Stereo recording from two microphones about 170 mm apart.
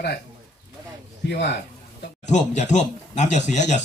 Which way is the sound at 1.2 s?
75° left (ahead or behind).